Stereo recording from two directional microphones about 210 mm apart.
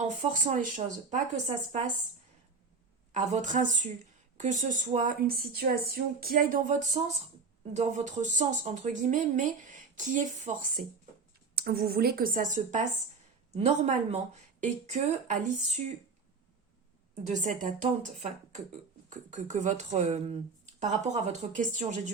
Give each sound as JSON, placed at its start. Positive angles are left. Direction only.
{"t": 0.2, "sound": "speech", "side_deg": -35}
{"t": 3.1, "sound": "speech", "side_deg": -35}
{"t": 11.5, "sound": "a woman's voice", "side_deg": -50}
{"t": 17.2, "sound": "speech", "side_deg": -35}